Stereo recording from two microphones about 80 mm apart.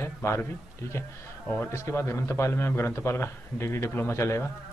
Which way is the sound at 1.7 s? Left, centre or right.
Left.